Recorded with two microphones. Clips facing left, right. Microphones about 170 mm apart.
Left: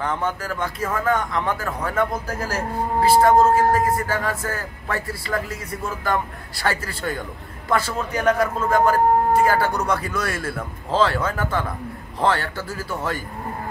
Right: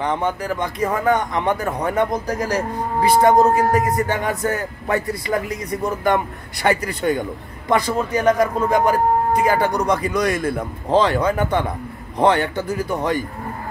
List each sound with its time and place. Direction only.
0.0 s speech: 15° right (ahead or behind)